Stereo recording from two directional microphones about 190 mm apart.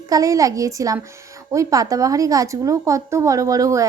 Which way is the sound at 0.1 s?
15° right (ahead or behind).